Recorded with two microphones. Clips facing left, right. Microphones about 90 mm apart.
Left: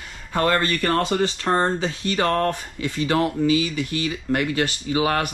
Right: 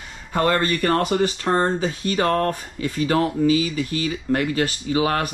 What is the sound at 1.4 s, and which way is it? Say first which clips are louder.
Speech: right 1 dB; 45° right (ahead or behind).